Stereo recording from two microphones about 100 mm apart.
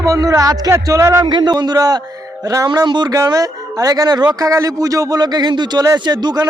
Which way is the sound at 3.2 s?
35° right (ahead or behind).